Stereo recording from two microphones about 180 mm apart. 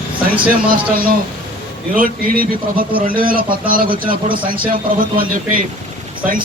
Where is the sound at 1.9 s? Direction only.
50° right (ahead or behind).